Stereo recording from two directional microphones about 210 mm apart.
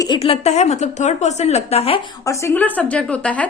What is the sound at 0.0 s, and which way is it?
A woman's voice, 25° left (ahead or behind).